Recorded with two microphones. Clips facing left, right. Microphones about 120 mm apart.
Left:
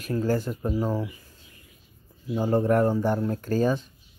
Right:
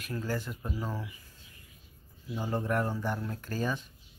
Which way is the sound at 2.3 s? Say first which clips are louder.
Left 9 dB; 35° left (ahead or behind).